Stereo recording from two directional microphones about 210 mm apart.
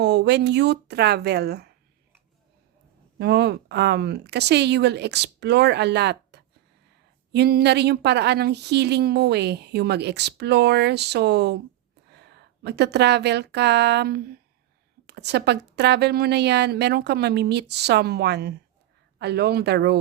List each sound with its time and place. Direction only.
0.0 s speech: 55° right (ahead or behind)
3.2 s speech: 50° right (ahead or behind)